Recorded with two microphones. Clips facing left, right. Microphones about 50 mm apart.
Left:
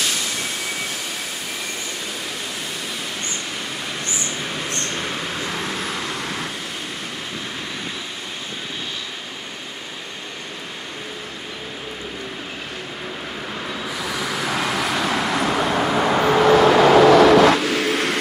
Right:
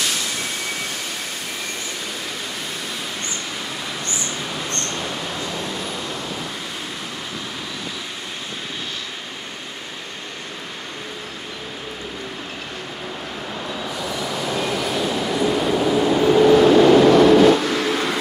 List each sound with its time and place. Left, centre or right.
0.0 s vehicle: centre
4.0 s vehicle: centre
13.8 s vehicle: centre
14.3 s vehicle: left
17.6 s vehicle: centre